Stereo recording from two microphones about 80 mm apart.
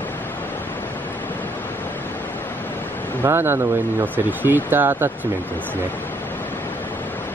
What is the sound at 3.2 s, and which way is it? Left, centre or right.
Speech, right.